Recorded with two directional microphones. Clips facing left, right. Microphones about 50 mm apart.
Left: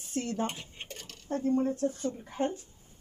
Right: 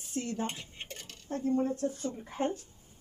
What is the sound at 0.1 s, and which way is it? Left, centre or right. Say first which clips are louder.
Dishes: left 2 dB; left.